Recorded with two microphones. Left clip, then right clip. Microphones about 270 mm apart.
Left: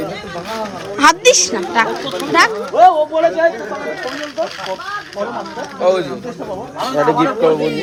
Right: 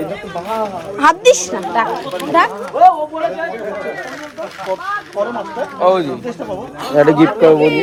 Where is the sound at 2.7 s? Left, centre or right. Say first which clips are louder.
Even; left.